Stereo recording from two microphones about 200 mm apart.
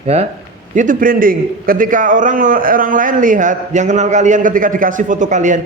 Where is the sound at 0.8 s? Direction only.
45° right (ahead or behind).